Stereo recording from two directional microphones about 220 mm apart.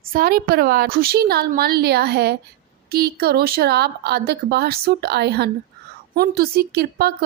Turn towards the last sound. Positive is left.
turn(degrees=-45)  # may be behind; listen again after turning